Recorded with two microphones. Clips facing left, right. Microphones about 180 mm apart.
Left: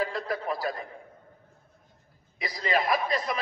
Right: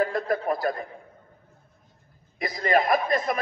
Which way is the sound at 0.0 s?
50° right (ahead or behind).